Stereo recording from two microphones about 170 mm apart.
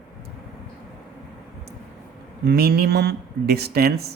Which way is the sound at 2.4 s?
70° right (ahead or behind).